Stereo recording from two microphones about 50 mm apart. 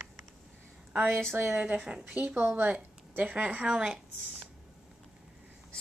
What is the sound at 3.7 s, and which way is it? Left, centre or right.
Speech, centre.